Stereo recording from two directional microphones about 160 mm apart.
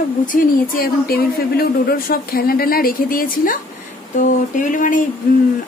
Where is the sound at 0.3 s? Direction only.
60° left (ahead or behind).